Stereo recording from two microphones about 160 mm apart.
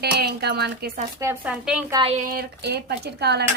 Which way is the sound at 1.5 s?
5° right (ahead or behind).